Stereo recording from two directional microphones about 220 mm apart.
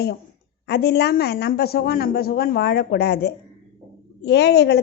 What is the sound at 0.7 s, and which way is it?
A woman's voice, 50° left (ahead or behind).